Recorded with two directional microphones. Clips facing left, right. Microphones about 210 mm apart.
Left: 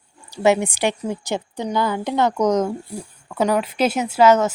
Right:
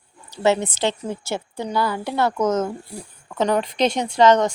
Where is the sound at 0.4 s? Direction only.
15° left (ahead or behind).